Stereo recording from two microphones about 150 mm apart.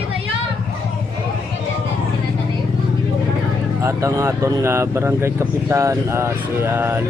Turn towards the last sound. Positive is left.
turn(degrees=-15)  # may be behind; listen again after turning